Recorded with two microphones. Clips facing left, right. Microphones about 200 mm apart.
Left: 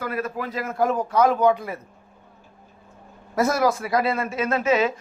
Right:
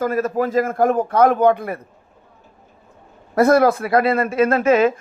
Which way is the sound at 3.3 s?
60° right (ahead or behind).